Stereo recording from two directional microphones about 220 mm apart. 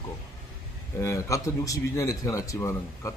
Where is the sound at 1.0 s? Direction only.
15° left (ahead or behind).